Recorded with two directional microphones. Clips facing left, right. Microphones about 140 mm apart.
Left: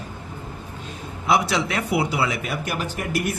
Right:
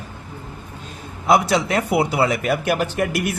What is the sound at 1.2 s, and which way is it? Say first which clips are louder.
Speech: right 4 dB; 45° right (ahead or behind).